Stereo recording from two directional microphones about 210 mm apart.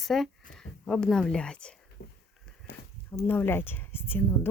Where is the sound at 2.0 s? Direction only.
50° left (ahead or behind).